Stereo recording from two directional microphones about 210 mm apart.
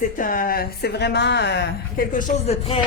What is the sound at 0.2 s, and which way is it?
Speech, 40° left (ahead or behind).